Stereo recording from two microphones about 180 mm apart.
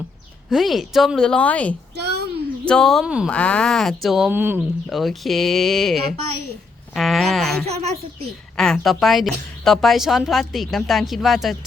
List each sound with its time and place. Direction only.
0.5 s a woman's voice: centre (ahead or behind)
2.0 s a sound: 65° right (ahead or behind)
2.6 s a woman's voice: 5° left (ahead or behind)
4.5 s a woman's voice: centre (ahead or behind)